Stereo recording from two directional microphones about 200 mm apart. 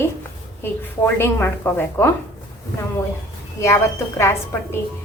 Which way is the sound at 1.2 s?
10° left (ahead or behind).